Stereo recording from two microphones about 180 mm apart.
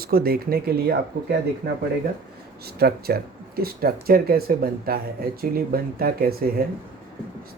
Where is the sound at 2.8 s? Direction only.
60° right (ahead or behind).